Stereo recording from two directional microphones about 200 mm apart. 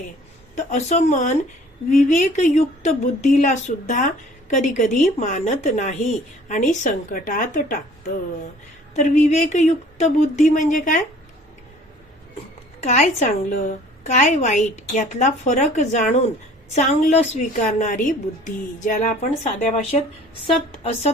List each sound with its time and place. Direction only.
0.5 s a woman's voice: 35° left (ahead or behind)
12.8 s a woman's voice: 35° left (ahead or behind)